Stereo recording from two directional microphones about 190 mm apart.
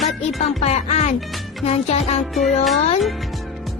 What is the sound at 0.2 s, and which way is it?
Music, 35° left (ahead or behind).